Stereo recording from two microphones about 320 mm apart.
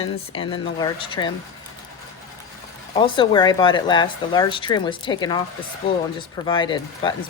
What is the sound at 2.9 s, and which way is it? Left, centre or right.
Speech, centre.